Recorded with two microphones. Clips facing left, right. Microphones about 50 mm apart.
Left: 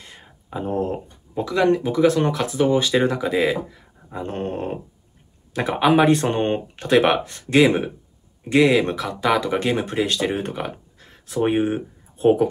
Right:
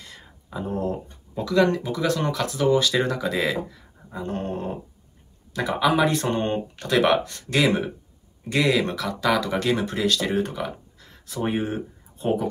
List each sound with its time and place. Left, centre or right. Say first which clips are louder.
0.0 s a sound: left 1 dB; left
1.3 s speech: left 2 dB; left
4.1 s speech: left 2 dB; left